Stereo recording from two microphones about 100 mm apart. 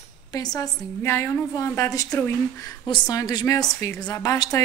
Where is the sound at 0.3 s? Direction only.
40° left (ahead or behind).